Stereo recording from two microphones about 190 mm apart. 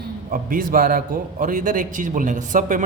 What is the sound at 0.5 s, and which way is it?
A man's voice, 50° right (ahead or behind).